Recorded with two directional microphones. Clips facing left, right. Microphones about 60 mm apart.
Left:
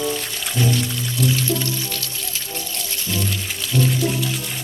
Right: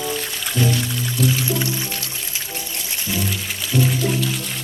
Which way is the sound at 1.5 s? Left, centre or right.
Right.